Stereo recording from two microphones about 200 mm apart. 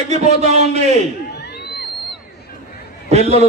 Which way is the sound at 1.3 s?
55° left (ahead or behind).